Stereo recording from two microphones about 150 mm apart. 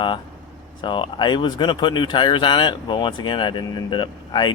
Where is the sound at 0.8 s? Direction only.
30° left (ahead or behind).